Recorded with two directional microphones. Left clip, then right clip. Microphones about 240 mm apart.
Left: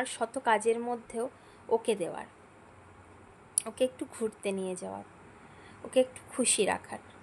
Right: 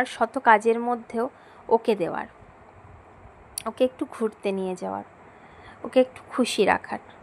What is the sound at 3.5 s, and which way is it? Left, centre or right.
A woman's voice, centre.